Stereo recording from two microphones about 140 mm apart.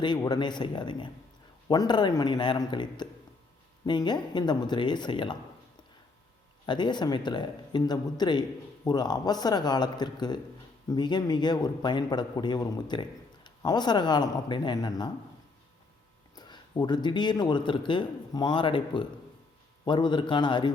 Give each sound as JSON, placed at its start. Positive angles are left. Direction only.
{"t": 0.0, "sound": "a man's voice", "side_deg": 30}
{"t": 6.7, "sound": "a man's voice", "side_deg": 35}
{"t": 16.3, "sound": "a man's voice", "side_deg": 30}